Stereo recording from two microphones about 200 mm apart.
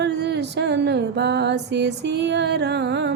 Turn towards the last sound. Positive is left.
turn(degrees=-60)  # may be behind; listen again after turning